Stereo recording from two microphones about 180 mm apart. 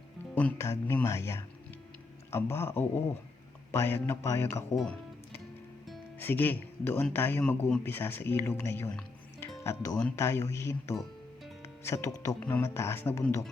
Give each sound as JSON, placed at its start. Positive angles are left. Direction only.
{"t": 0.3, "sound": "speech", "side_deg": 10}
{"t": 4.8, "sound": "music", "side_deg": 5}
{"t": 6.1, "sound": "speech", "side_deg": 10}